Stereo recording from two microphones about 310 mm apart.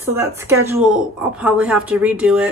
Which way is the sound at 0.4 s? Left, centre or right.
Centre.